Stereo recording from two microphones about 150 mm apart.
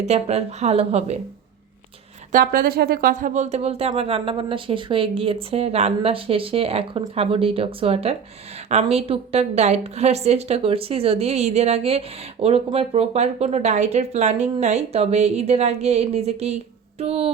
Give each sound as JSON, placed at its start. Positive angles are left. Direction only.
{"t": 0.0, "sound": "a woman's voice", "side_deg": -45}
{"t": 2.3, "sound": "a woman's voice", "side_deg": -70}